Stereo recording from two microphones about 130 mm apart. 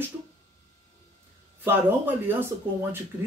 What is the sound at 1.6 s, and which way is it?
Speech, 15° right (ahead or behind).